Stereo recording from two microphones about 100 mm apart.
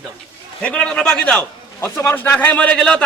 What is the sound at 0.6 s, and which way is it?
A man's voice, 10° left (ahead or behind).